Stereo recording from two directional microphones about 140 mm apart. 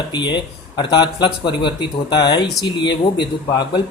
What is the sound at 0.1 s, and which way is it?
Speech, 35° left (ahead or behind).